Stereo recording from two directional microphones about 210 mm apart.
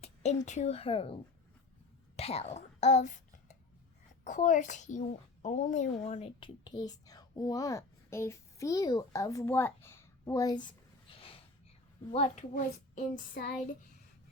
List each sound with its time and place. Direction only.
0.0 s a woman's voice: 30° left (ahead or behind)
2.1 s throat clearing: 30° left (ahead or behind)
4.2 s a child's voice: 35° left (ahead or behind); by 10.8 s 20° left (ahead or behind)
12.1 s speech: 30° left (ahead or behind)